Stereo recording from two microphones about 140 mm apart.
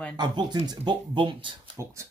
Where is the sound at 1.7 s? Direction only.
20° right (ahead or behind).